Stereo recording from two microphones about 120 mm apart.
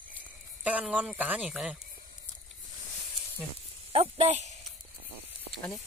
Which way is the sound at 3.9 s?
55° right (ahead or behind).